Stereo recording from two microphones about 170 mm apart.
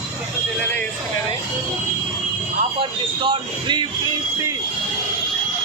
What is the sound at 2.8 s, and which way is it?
Speech, 30° right (ahead or behind).